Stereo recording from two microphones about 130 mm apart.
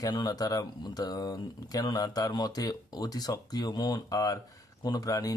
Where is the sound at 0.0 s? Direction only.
30° left (ahead or behind).